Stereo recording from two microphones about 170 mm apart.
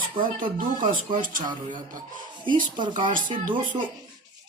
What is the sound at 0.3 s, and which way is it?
Speech, 55° right (ahead or behind).